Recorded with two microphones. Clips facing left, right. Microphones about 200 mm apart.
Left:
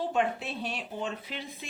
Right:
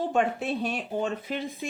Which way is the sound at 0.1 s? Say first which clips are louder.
Right 4 dB; 50° right (ahead or behind).